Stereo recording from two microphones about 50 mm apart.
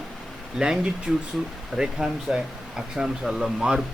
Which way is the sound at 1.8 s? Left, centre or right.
Centre.